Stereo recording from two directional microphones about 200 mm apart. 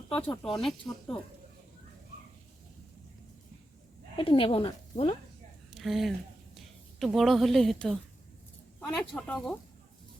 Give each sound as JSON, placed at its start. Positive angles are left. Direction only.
{"t": 0.2, "sound": "speech", "side_deg": 5}
{"t": 4.2, "sound": "speech", "side_deg": 25}
{"t": 5.7, "sound": "a woman's voice", "side_deg": 0}
{"t": 9.0, "sound": "speech", "side_deg": 5}